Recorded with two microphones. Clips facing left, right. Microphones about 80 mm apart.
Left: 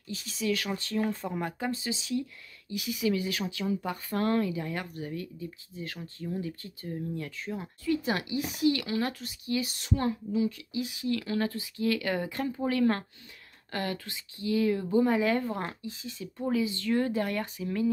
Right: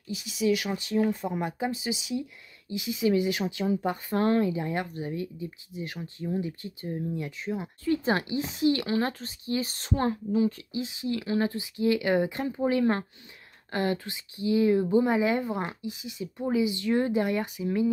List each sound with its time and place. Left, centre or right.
0.1 s a woman's voice: centre
7.8 s a woman's voice: right